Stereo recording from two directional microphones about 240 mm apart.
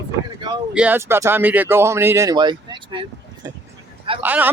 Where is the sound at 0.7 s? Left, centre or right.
Centre.